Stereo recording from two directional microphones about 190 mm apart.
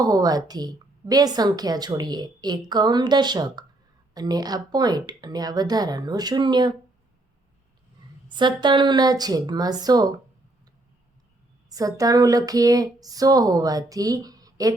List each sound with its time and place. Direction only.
0.0 s a woman's voice: 20° right (ahead or behind)
8.3 s a woman's voice: 25° right (ahead or behind)
11.7 s a woman's voice: 20° right (ahead or behind)